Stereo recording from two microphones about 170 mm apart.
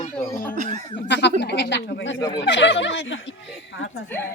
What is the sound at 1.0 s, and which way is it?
Speech, 90° left.